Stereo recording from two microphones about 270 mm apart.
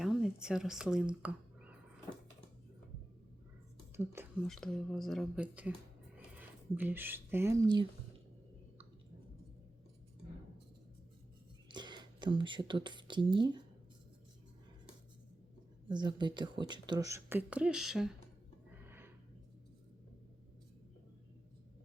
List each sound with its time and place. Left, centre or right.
0.0 s a sound: centre
3.9 s speech: centre
4.4 s speech: centre
11.7 s speech: centre
15.9 s speech: centre
18.9 s a sound: centre